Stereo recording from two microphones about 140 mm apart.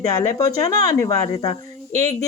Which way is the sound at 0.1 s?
25° left (ahead or behind).